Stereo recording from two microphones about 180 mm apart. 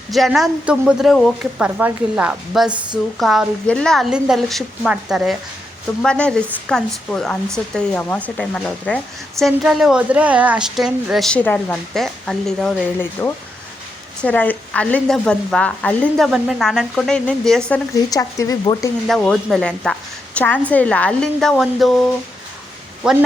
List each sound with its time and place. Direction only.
0.1 s a woman's voice: centre (ahead or behind)
18.1 s speech: 20° left (ahead or behind)
19.0 s a woman's voice: centre (ahead or behind)